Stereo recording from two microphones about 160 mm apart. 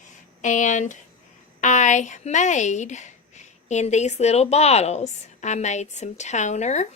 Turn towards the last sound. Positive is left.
turn(degrees=45)  # may be behind; listen again after turning